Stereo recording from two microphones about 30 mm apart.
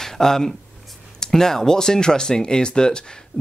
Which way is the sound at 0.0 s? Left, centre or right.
Centre.